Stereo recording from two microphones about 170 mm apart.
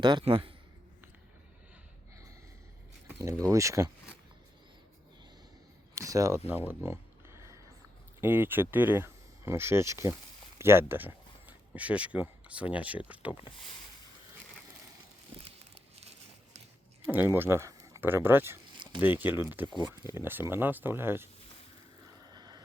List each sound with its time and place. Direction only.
0.0 s speech: 30° right (ahead or behind)
3.1 s a sound: 15° right (ahead or behind)
3.4 s speech: 20° right (ahead or behind)
5.9 s speech: 20° right (ahead or behind)
8.2 s speech: 10° right (ahead or behind)
15.4 s crumpling: 35° right (ahead or behind)
17.1 s speech: 10° right (ahead or behind)
22.3 s boat: 25° right (ahead or behind)